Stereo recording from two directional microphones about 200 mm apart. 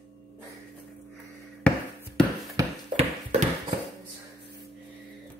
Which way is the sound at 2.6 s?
15° right (ahead or behind).